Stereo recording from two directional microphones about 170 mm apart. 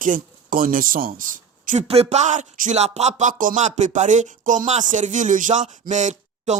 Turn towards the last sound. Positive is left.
turn(degrees=-45)  # may be behind; listen again after turning